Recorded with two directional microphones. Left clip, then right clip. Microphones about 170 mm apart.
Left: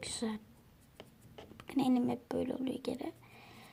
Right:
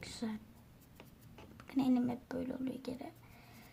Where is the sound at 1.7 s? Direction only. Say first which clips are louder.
Left 2 dB; 15° left (ahead or behind).